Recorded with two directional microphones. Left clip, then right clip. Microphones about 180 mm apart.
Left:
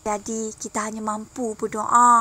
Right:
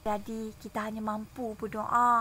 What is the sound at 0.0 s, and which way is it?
A woman's voice, 30° left (ahead or behind).